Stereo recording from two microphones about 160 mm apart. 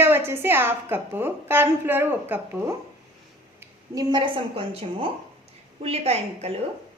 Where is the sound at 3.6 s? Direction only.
25° right (ahead or behind).